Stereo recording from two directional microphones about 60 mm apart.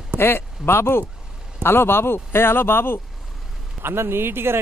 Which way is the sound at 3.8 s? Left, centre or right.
Right.